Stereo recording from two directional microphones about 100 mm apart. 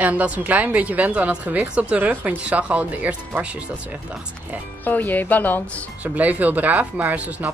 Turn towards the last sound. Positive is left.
turn(degrees=-15)  # may be behind; listen again after turning